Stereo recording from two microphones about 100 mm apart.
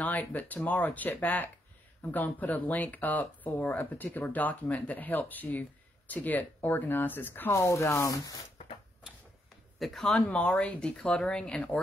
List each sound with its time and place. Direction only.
0.0 s speech: 15° left (ahead or behind); by 8.4 s 35° left (ahead or behind)
9.8 s speech: centre (ahead or behind)